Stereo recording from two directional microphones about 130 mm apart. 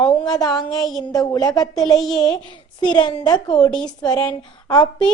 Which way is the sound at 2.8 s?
35° left (ahead or behind).